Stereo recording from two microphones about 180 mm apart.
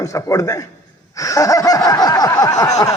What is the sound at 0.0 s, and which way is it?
Speech, 20° left (ahead or behind).